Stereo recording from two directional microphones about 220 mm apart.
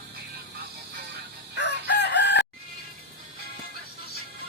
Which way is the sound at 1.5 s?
50° left (ahead or behind).